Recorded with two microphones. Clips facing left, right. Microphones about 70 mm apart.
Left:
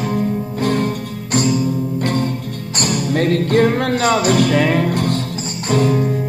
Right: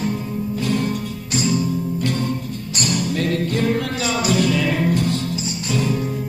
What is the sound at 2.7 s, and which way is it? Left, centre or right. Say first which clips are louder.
Music: left 4 dB; left.